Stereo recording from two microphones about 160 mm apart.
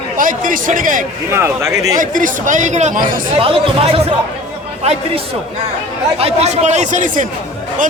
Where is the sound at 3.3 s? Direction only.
35° right (ahead or behind); by 7.3 s 55° right (ahead or behind).